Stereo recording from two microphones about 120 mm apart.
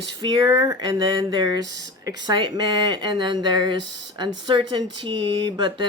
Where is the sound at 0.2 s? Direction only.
35° right (ahead or behind).